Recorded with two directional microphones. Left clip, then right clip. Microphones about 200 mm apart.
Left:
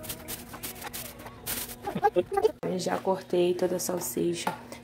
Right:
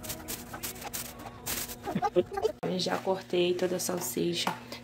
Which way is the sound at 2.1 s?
20° left (ahead or behind).